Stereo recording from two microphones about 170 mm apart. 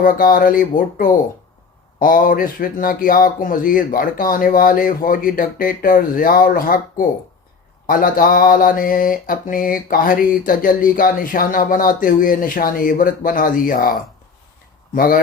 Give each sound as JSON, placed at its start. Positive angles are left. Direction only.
{"t": 0.0, "sound": "mantra", "side_deg": 55}